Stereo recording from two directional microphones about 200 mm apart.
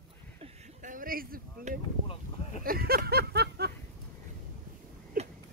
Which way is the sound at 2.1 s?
35° left (ahead or behind).